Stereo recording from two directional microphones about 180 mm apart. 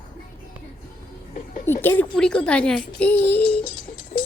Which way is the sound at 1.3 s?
50° left (ahead or behind).